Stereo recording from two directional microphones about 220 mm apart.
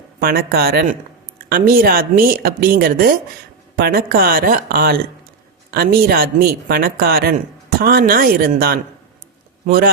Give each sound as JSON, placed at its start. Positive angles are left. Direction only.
{"t": 0.2, "sound": "speech", "side_deg": -45}